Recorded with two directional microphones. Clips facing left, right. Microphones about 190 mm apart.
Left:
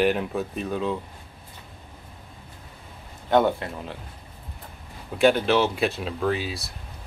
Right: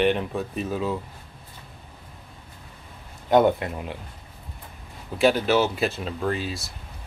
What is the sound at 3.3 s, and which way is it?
Speech, 15° right (ahead or behind).